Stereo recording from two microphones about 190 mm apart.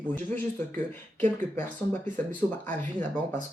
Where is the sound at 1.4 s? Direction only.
10° left (ahead or behind).